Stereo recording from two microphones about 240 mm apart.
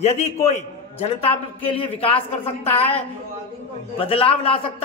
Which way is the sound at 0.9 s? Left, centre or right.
Left.